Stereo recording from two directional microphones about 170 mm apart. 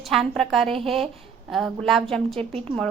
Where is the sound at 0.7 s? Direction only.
35° right (ahead or behind).